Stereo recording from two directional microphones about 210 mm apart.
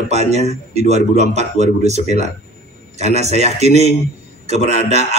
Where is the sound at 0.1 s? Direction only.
30° right (ahead or behind).